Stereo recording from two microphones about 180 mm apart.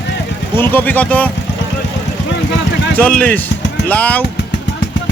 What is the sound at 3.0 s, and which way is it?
Speech, 5° left (ahead or behind).